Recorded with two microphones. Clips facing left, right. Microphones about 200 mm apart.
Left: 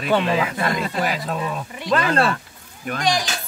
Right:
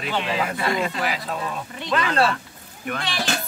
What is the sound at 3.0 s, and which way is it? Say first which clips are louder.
Speech: left 10 dB; 15° left (ahead or behind).